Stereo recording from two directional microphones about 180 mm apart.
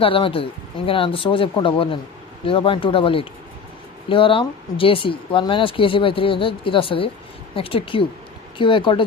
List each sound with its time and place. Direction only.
0.0 s speech: 30° left (ahead or behind)